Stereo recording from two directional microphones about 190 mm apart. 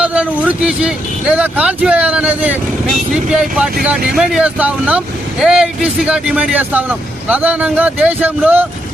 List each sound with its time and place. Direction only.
0.0 s speech: 5° right (ahead or behind)